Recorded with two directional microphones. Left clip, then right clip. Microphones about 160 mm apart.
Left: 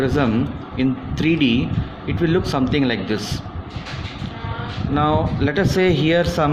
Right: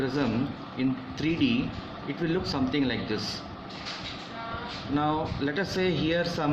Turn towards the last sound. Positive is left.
turn(degrees=65)  # may be behind; listen again after turning